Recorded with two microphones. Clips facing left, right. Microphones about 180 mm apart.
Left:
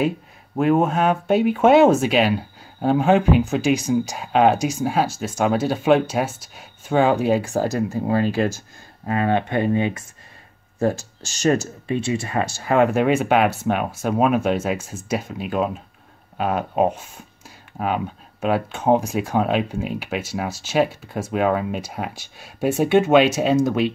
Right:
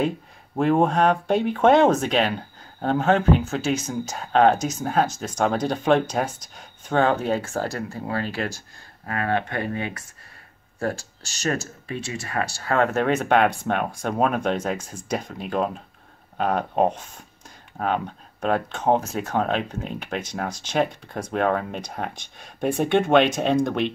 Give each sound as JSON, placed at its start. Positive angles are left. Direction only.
{"t": 0.6, "sound": "speech", "side_deg": 5}
{"t": 11.4, "sound": "speech", "side_deg": 25}